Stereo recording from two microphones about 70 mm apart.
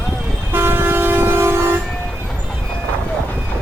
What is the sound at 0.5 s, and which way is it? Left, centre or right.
Vehicle, right.